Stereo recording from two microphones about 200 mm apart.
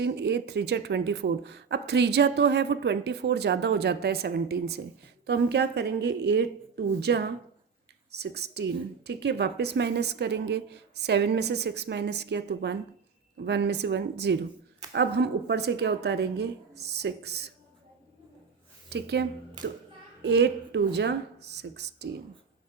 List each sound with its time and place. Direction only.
0.0 s speech: 60° right (ahead or behind)
18.9 s speech: 55° right (ahead or behind)